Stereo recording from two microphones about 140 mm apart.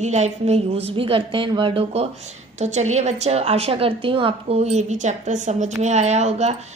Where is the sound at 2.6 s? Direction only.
55° right (ahead or behind).